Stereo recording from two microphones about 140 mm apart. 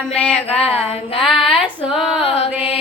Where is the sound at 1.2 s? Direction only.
5° right (ahead or behind).